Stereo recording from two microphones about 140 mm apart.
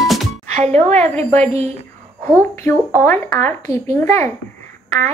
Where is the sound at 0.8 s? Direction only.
50° right (ahead or behind).